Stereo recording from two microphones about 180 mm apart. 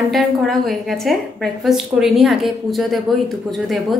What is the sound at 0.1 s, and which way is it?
A woman's voice, centre (ahead or behind).